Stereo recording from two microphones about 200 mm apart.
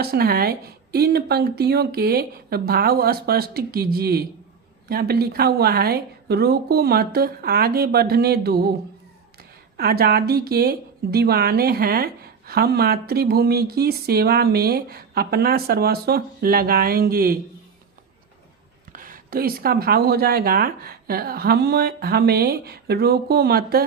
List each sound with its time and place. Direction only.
0.0 s speech: 50° right (ahead or behind)
9.7 s speech: 50° right (ahead or behind)
18.9 s speech: 45° right (ahead or behind)